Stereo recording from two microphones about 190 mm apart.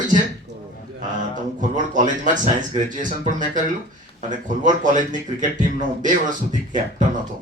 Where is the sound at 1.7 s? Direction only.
40° right (ahead or behind).